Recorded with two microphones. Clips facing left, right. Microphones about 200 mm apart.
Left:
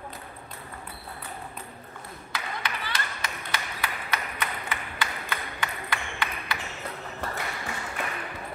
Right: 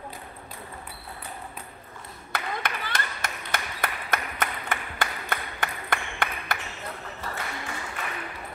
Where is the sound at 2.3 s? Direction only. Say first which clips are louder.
Right 3 dB; 45° right (ahead or behind).